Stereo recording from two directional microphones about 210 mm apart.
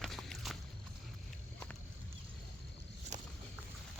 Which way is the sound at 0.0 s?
Centre (ahead or behind).